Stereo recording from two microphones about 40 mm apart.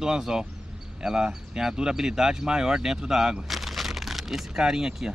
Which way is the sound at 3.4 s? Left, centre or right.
Centre.